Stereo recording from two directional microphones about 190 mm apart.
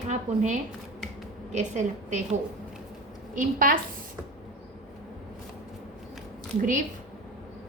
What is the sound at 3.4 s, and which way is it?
Speech, 45° right (ahead or behind).